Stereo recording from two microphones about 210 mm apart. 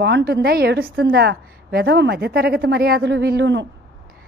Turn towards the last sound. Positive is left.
turn(degrees=-55)  # may be behind; listen again after turning